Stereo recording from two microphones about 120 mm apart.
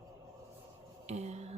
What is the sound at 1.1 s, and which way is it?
Speech, 65° right (ahead or behind).